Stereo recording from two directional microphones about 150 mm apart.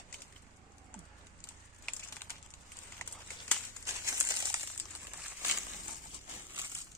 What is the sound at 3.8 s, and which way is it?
Crumpling, 20° right (ahead or behind).